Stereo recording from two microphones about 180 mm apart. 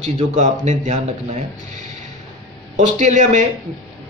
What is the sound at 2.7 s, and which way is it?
Speech, 40° right (ahead or behind).